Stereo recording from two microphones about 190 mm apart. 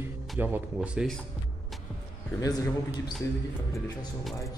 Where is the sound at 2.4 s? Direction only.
15° left (ahead or behind).